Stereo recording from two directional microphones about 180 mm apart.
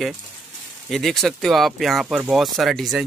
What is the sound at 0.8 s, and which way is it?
Speech, centre (ahead or behind).